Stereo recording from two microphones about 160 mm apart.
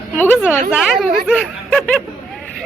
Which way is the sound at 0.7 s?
Centre (ahead or behind).